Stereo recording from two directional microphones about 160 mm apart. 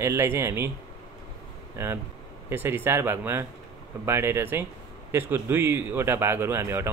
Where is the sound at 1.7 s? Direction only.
15° right (ahead or behind).